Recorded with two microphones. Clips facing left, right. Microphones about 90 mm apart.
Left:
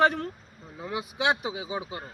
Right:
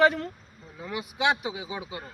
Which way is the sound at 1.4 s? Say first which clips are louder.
Left 2 dB; 30° left (ahead or behind).